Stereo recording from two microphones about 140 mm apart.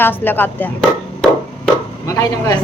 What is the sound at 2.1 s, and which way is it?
Speech, 25° left (ahead or behind).